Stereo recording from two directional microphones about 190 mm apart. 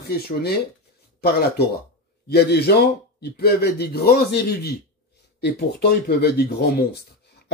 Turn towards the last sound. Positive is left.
turn(degrees=55)  # may be behind; listen again after turning